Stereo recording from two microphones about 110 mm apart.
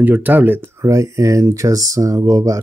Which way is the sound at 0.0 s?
15° right (ahead or behind).